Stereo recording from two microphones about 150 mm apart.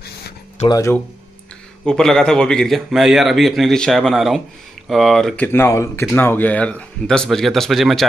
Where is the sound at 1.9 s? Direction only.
5° left (ahead or behind).